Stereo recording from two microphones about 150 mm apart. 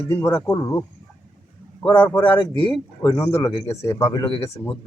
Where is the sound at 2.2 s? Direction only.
30° left (ahead or behind).